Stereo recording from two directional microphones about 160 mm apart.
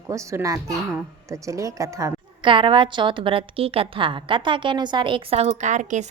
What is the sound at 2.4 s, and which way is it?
A woman's voice, 30° right (ahead or behind).